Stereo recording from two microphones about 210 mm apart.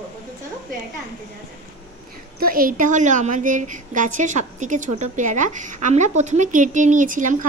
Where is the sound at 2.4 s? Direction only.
40° right (ahead or behind).